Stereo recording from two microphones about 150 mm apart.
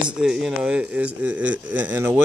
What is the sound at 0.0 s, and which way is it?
Speech, 5° right (ahead or behind).